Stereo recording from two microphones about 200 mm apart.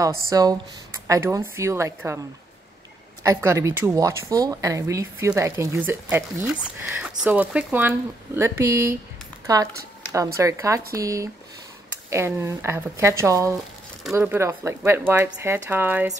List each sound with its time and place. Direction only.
0.0 s speech: 15° right (ahead or behind)
3.3 s speech: 15° right (ahead or behind)